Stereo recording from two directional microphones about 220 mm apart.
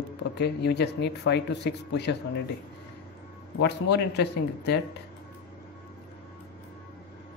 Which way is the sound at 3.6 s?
50° left (ahead or behind).